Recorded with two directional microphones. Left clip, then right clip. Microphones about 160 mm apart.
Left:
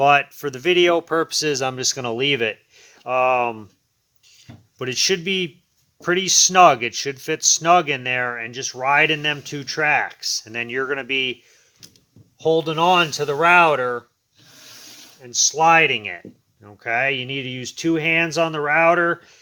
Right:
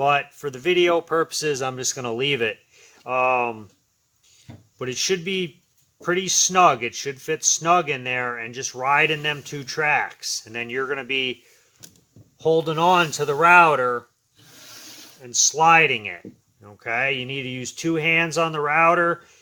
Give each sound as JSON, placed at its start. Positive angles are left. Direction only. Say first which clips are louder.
{"t": 0.0, "sound": "speech", "louder": "left 5 dB", "side_deg": 50}
{"t": 12.4, "sound": "speech", "louder": "left 1 dB", "side_deg": 10}
{"t": 15.2, "sound": "speech", "louder": "left 1 dB", "side_deg": 5}